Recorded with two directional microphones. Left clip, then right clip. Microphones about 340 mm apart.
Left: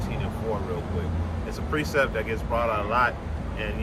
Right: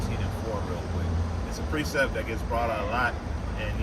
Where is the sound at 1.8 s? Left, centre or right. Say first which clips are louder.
Left 2 dB; centre.